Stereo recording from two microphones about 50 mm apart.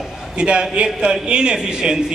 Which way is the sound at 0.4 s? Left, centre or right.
Centre.